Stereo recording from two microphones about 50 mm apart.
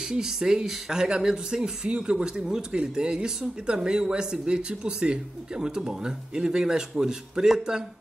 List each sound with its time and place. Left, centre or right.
0.0 s speech: centre